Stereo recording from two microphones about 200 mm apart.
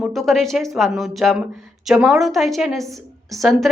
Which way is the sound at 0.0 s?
Centre (ahead or behind).